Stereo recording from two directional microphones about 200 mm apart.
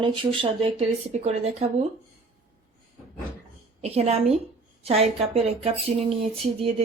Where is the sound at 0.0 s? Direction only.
25° right (ahead or behind).